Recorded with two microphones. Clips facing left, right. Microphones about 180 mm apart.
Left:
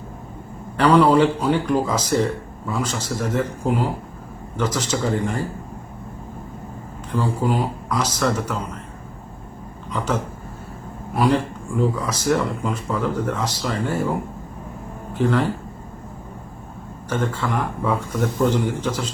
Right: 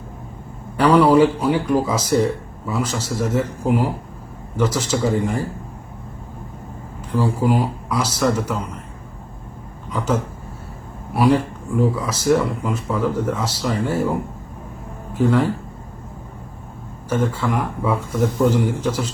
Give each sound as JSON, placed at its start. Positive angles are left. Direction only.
{"t": 0.8, "sound": "speech", "side_deg": -10}
{"t": 7.2, "sound": "speech", "side_deg": -10}
{"t": 11.1, "sound": "speech", "side_deg": -5}
{"t": 15.2, "sound": "speech", "side_deg": -10}
{"t": 17.1, "sound": "speech", "side_deg": -10}